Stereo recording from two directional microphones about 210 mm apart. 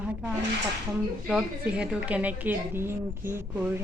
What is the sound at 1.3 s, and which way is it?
A woman's voice, 5° right (ahead or behind).